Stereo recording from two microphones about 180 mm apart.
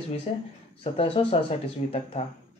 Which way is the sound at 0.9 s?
30° left (ahead or behind).